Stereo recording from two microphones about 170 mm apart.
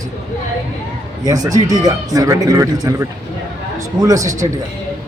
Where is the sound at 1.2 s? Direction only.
20° right (ahead or behind).